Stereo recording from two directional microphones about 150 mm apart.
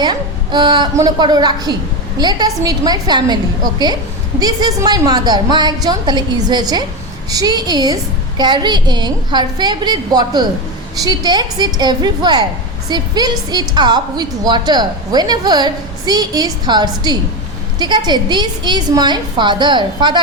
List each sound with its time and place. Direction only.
0.0 s a woman's voice: 30° right (ahead or behind)